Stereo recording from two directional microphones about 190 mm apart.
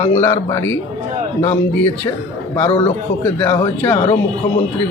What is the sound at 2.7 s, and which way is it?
Speech, 30° left (ahead or behind).